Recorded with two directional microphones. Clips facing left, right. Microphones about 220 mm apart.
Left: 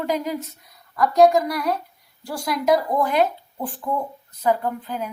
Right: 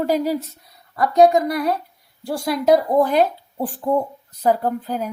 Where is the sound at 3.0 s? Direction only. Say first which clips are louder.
Right 3 dB; 35° right (ahead or behind).